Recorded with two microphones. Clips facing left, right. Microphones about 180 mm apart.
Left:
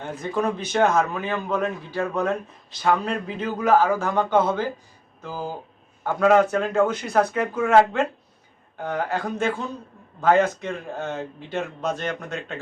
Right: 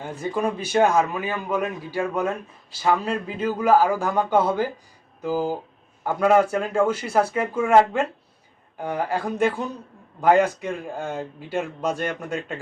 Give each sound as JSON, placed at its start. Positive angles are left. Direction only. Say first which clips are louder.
{"t": 0.0, "sound": "a man's voice", "louder": "even", "side_deg": -10}